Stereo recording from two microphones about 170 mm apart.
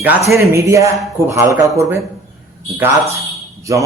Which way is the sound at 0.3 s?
15° right (ahead or behind).